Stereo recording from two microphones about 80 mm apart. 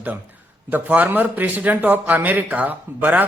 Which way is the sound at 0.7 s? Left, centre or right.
Right.